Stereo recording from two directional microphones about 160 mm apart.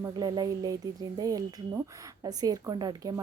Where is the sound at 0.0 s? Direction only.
25° right (ahead or behind).